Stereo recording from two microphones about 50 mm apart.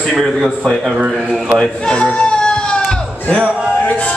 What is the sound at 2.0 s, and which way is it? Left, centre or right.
Baby cry, left.